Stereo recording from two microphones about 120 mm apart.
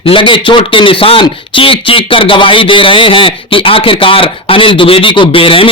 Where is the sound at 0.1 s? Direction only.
45° left (ahead or behind).